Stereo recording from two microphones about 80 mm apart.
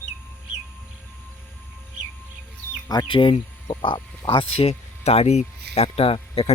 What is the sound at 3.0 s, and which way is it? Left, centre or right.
Speech, left.